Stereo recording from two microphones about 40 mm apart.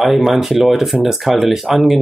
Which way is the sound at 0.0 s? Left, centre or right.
Centre.